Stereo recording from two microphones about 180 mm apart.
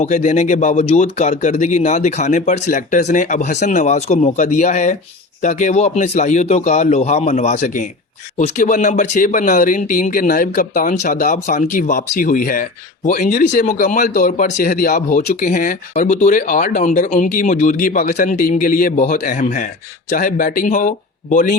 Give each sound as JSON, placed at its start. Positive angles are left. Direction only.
{"t": 0.0, "sound": "speech", "side_deg": 40}